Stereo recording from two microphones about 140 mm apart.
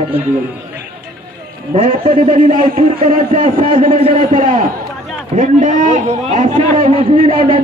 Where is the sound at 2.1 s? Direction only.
80° right.